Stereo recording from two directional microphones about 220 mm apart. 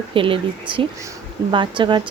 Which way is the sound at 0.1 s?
25° right (ahead or behind).